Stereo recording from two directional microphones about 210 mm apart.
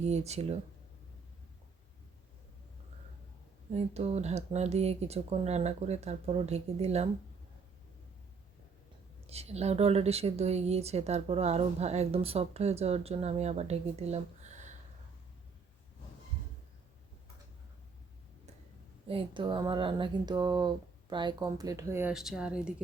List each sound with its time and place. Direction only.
0.0 s speech: 30° right (ahead or behind)
3.7 s speech: 30° right (ahead or behind)
9.2 s speech: 30° right (ahead or behind)
19.0 s speech: 25° right (ahead or behind); by 22.7 s 5° right (ahead or behind)